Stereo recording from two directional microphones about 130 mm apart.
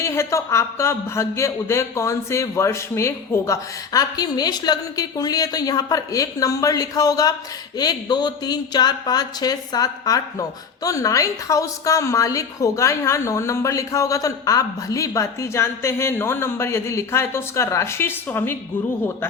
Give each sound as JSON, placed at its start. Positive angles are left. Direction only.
{"t": 0.0, "sound": "a woman's voice", "side_deg": 20}